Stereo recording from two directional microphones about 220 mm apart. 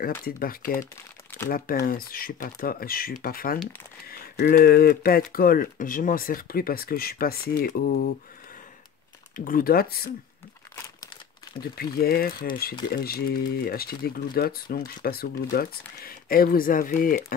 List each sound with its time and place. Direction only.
0.2 s speech: 40° left (ahead or behind)
9.4 s speech: 40° left (ahead or behind)
11.6 s speech: 45° left (ahead or behind)